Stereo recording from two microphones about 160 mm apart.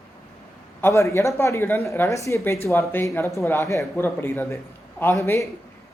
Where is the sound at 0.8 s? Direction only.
15° left (ahead or behind).